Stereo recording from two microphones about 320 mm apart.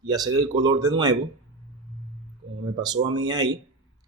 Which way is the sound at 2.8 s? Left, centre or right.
Centre.